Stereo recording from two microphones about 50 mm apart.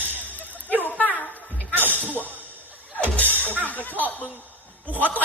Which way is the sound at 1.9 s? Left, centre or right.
Left.